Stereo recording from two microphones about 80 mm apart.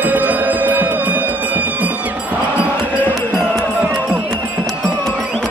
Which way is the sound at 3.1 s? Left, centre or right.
Centre.